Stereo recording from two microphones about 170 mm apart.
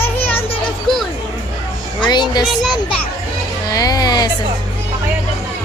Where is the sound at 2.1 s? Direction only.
25° left (ahead or behind).